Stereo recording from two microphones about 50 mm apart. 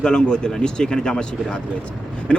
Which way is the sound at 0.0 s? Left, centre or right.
Centre.